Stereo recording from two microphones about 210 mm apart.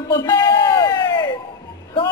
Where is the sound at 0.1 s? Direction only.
15° left (ahead or behind).